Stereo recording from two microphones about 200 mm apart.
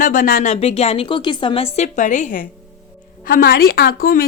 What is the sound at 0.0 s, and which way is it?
Speech, 45° left (ahead or behind).